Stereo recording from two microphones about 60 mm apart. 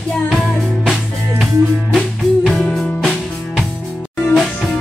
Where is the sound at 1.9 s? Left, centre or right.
Centre.